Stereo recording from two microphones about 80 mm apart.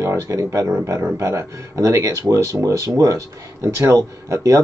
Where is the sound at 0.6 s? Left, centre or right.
Right.